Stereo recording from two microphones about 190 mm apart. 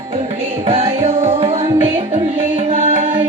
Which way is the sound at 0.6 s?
30° right (ahead or behind).